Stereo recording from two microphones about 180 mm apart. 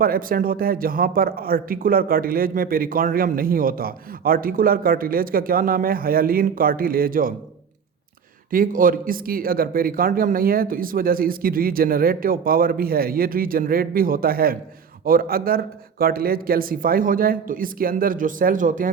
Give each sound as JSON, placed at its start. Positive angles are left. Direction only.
{"t": 0.0, "sound": "speech", "side_deg": -50}
{"t": 8.4, "sound": "speech", "side_deg": -50}